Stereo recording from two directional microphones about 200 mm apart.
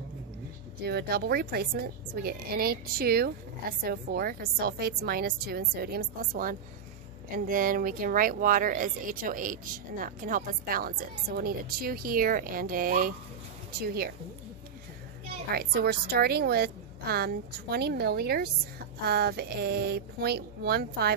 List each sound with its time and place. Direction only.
0.8 s speech: 55° right (ahead or behind)
15.5 s speech: 50° right (ahead or behind)